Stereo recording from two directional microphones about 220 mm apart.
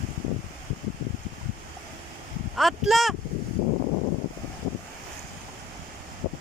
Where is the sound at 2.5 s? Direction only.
Centre (ahead or behind).